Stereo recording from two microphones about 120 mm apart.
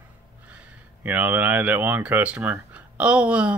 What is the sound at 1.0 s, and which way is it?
Speech, 15° right (ahead or behind).